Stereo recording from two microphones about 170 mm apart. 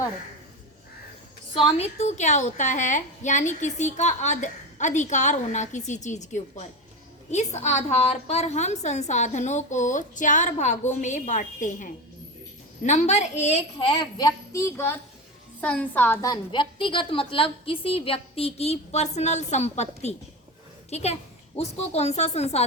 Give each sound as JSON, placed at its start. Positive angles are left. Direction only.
{"t": 1.5, "sound": "a woman's voice", "side_deg": 35}
{"t": 16.2, "sound": "a woman's voice", "side_deg": 25}